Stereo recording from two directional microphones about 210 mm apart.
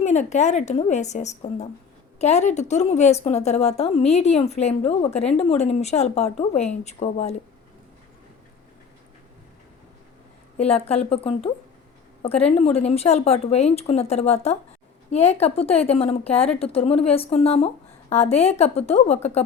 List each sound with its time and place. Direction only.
0.0 s a woman's voice: 35° left (ahead or behind)
10.6 s a woman's voice: 30° left (ahead or behind)